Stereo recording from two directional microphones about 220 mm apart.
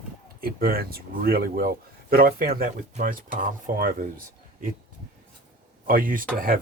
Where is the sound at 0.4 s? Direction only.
45° right (ahead or behind).